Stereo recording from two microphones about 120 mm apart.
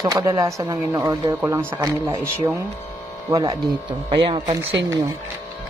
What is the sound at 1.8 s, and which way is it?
Speech, 30° right (ahead or behind).